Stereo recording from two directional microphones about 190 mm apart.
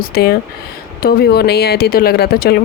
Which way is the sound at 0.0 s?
55° left (ahead or behind).